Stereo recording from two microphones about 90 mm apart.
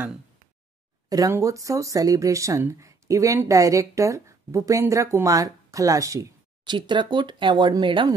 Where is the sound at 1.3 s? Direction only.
35° right (ahead or behind).